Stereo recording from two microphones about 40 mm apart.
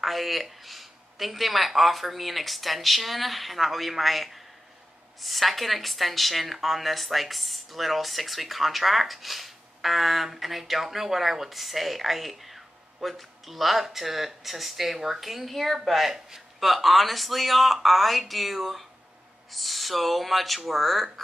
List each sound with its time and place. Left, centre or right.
0.0 s a woman's voice: centre